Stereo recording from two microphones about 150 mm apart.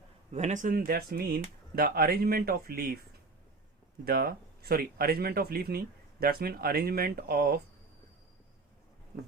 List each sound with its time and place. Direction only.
0.3 s speech: 50° right (ahead or behind); by 3.0 s 90° right
4.0 s speech: 85° right